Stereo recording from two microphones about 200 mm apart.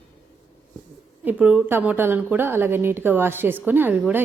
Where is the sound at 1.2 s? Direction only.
5° right (ahead or behind).